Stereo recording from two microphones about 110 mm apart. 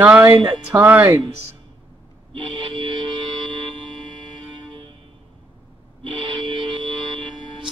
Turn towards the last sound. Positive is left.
turn(degrees=-45)  # may be behind; listen again after turning